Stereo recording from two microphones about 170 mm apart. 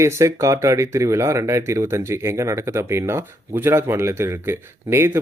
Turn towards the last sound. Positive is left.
turn(degrees=-15)  # may be behind; listen again after turning